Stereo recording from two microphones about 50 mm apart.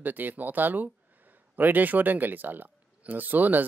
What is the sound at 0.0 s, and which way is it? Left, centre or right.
Speech, right.